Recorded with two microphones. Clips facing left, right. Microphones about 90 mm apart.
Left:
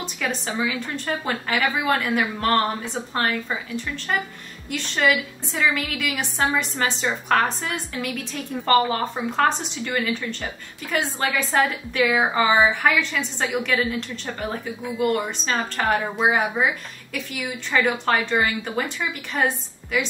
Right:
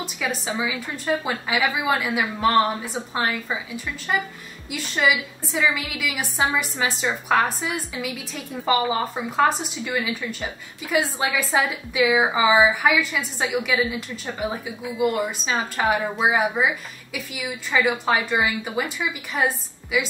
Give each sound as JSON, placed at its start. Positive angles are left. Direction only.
{"t": 0.0, "sound": "a woman's voice", "side_deg": -5}